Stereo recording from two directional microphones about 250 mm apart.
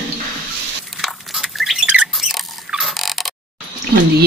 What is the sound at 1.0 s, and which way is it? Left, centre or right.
Squawk, centre.